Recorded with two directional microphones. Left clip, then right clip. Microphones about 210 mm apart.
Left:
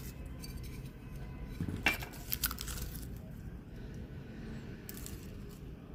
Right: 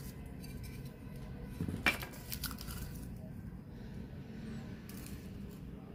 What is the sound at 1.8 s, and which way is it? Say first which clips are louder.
Cutlery: left 1 dB; 15° left (ahead or behind).